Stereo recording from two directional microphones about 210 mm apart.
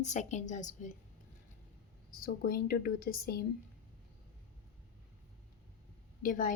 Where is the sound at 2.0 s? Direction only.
45° left (ahead or behind).